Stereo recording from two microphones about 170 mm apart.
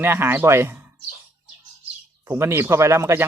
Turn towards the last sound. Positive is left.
turn(degrees=-15)  # may be behind; listen again after turning